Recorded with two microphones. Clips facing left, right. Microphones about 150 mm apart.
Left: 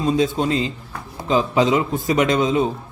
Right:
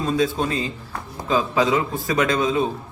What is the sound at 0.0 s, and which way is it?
A man's voice, 20° left (ahead or behind).